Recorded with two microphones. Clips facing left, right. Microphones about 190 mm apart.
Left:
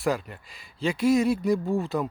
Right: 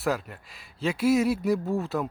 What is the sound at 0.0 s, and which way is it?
Speech, centre (ahead or behind).